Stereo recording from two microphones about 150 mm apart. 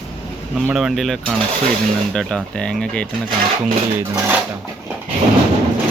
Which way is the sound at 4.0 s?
15° right (ahead or behind).